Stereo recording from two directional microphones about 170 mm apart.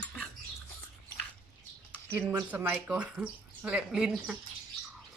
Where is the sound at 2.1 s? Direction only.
10° right (ahead or behind).